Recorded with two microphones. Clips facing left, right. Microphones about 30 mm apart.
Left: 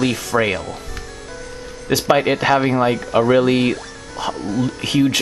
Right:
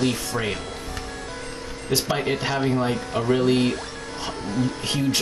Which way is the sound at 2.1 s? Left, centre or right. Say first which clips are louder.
Left 8 dB; left.